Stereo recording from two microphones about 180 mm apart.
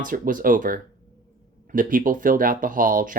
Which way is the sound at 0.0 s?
50° right (ahead or behind).